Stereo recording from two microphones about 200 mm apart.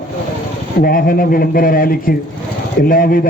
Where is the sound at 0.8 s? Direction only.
45° left (ahead or behind).